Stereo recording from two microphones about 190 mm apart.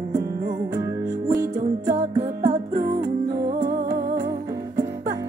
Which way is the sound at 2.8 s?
20° right (ahead or behind).